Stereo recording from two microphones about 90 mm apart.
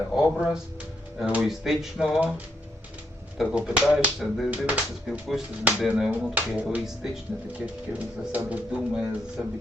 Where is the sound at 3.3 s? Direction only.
10° right (ahead or behind).